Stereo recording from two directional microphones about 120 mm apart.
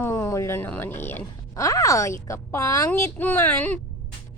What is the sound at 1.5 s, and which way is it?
Speech, 30° left (ahead or behind).